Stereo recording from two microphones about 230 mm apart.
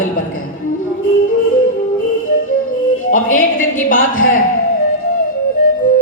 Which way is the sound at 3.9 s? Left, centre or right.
Left.